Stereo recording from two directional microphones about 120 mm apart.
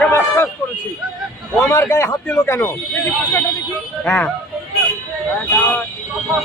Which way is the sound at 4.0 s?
15° left (ahead or behind).